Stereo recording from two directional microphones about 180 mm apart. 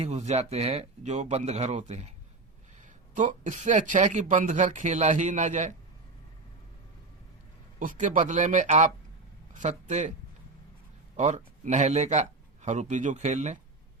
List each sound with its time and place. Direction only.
0.0 s speech: 35° right (ahead or behind)
7.8 s speech: 45° right (ahead or behind)
11.2 s speech: 40° right (ahead or behind)